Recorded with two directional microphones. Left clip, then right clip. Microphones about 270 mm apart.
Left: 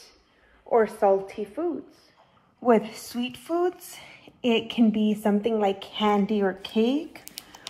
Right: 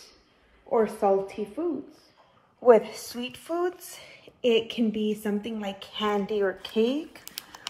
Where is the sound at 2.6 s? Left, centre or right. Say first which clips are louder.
Right 3 dB; centre.